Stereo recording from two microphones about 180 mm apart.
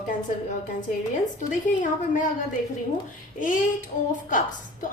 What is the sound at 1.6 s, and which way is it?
Speech, 45° left (ahead or behind).